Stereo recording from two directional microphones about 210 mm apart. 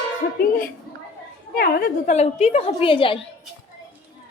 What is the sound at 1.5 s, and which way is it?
Speech, 45° left (ahead or behind).